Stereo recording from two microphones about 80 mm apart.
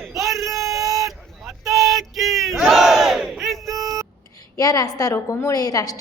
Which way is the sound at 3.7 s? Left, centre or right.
Right.